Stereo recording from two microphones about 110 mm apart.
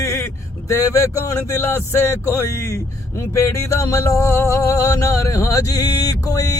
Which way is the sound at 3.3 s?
25° left (ahead or behind).